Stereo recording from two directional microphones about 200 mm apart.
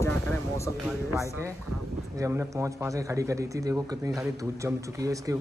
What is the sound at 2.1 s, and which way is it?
Speech, 15° right (ahead or behind).